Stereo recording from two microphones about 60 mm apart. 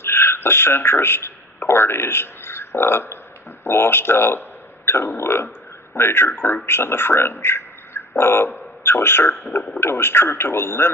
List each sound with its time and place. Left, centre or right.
0.0 s speech: left
4.9 s burping: left
6.0 s a man's voice: left